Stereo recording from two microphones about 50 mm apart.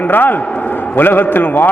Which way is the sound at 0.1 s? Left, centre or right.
Left.